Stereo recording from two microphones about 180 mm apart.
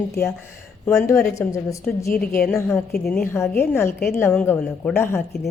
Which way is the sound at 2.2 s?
5° left (ahead or behind).